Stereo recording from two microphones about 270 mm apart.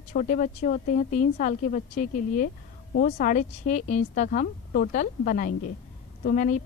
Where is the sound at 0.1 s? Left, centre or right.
Left.